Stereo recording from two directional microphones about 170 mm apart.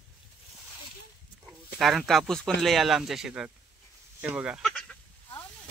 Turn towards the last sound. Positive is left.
turn(degrees=-5)  # may be behind; listen again after turning